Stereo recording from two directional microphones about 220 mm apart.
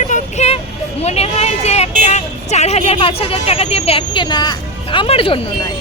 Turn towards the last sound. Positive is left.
turn(degrees=25)  # may be behind; listen again after turning